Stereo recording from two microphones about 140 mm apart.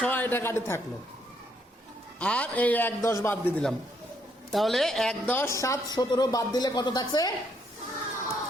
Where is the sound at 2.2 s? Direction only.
10° left (ahead or behind).